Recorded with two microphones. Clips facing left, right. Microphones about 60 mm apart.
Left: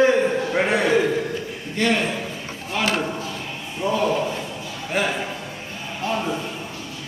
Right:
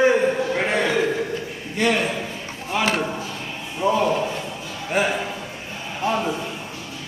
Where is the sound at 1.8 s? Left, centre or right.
Centre.